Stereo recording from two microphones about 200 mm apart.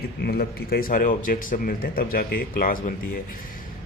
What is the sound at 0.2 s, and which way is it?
Speech, 50° left (ahead or behind).